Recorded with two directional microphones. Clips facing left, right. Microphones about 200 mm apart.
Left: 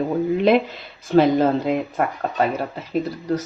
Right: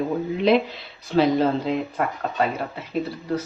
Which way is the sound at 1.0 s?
50° left (ahead or behind).